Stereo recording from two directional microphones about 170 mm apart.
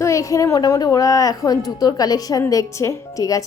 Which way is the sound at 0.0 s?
20° left (ahead or behind).